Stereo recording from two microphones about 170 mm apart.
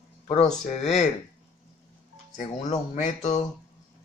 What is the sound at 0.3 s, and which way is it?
Speech, 40° left (ahead or behind).